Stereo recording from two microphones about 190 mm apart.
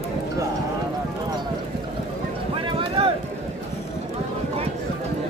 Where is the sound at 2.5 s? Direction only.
30° right (ahead or behind).